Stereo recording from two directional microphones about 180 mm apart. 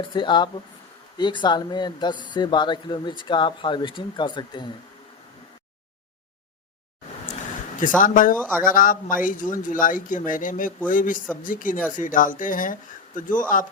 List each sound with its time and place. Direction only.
0.0 s speech: 25° left (ahead or behind)
7.8 s a man's voice: 45° left (ahead or behind)